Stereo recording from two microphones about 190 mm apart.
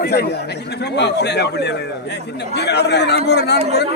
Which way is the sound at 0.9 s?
65° left (ahead or behind).